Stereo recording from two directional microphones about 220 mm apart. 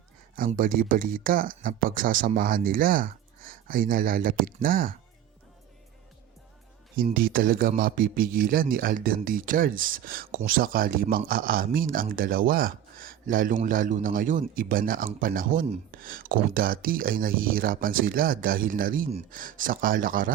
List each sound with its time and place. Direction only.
0.3 s a man's voice: 40° right (ahead or behind)
6.9 s a man's voice: 40° right (ahead or behind)